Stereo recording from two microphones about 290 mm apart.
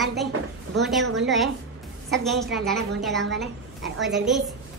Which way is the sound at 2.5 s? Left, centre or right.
Centre.